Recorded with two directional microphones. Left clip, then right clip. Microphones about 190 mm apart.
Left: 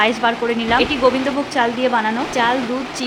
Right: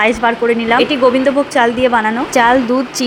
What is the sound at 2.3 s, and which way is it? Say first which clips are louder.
Speech: right 8 dB; 35° right (ahead or behind).